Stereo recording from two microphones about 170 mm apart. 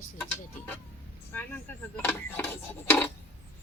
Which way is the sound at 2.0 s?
10° left (ahead or behind).